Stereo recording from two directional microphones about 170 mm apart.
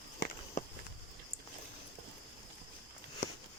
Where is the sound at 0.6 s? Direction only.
50° left (ahead or behind).